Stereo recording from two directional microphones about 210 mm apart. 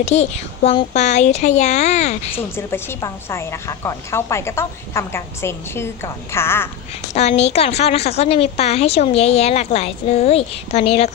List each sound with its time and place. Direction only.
0.0 s speech: 30° left (ahead or behind)
2.4 s a woman's voice: 10° left (ahead or behind)
7.1 s a woman's voice: 30° left (ahead or behind)